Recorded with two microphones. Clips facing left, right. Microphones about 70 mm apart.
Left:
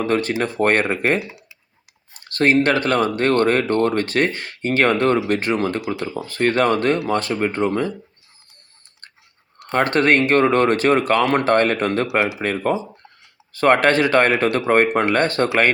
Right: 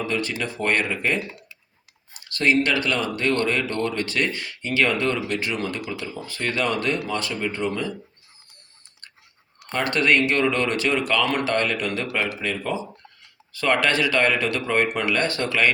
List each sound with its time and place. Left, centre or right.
0.0 s speech: left
1.2 s speech: centre
2.2 s speech: left
9.7 s speech: left